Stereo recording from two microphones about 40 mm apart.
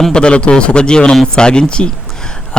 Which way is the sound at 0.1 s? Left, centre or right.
Left.